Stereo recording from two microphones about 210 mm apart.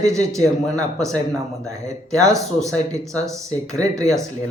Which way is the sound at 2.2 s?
15° right (ahead or behind).